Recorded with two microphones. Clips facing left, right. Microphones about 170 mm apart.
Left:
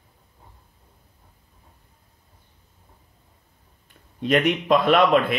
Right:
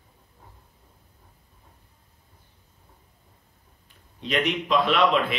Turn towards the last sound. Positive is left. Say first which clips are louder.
# left 4 dB
turn(degrees=50)  # may be behind; listen again after turning